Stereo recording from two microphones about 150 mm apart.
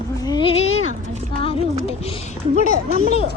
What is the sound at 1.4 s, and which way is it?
Speech, 40° left (ahead or behind).